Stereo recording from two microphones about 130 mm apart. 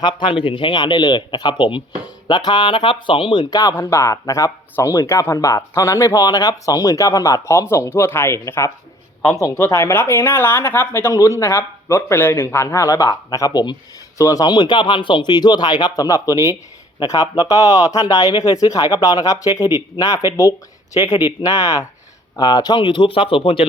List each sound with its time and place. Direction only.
0.0 s speech: 40° left (ahead or behind)
3.5 s speech: 25° left (ahead or behind)
21.4 s speech: 25° left (ahead or behind); by 23.6 s 40° left (ahead or behind)